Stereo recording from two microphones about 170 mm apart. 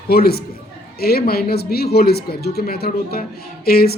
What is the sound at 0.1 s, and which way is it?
Speech, 65° left (ahead or behind).